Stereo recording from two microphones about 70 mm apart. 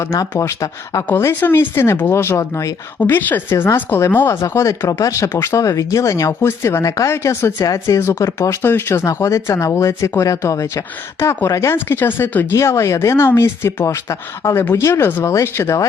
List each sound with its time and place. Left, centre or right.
0.0 s speech: left
1.2 s speech: left
3.0 s a woman's voice: left
4.4 s speech: left
6.4 s speech: left
6.8 s speech: left
7.6 s speech: left
7.9 s speech: left
8.6 s speech: left
12.5 s speech: left